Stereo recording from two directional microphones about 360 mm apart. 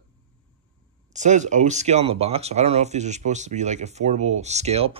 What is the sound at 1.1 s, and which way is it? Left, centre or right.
Speech, centre.